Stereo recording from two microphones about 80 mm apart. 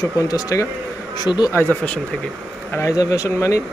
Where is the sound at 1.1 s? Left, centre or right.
Left.